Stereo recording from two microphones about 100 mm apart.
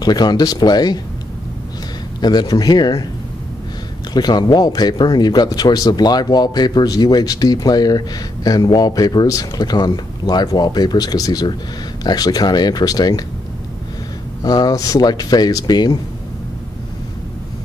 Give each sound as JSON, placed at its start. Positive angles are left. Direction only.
{"t": 0.0, "sound": "speech", "side_deg": 45}
{"t": 2.1, "sound": "speech", "side_deg": 45}
{"t": 4.1, "sound": "speech", "side_deg": 45}
{"t": 14.4, "sound": "speech", "side_deg": 40}